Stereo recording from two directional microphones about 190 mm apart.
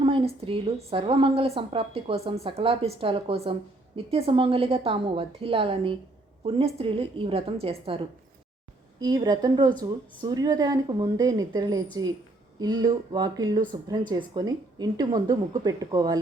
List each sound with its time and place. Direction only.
0.0 s a woman's voice: 30° right (ahead or behind)